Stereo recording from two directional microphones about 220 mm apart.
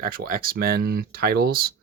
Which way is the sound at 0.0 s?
40° right (ahead or behind).